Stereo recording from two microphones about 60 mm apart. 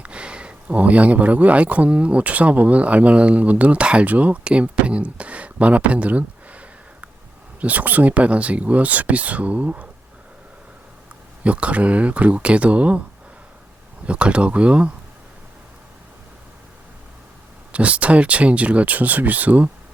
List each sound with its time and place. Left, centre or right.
0.0 s speech: centre
11.4 s speech: right
14.1 s speech: centre
17.7 s speech: right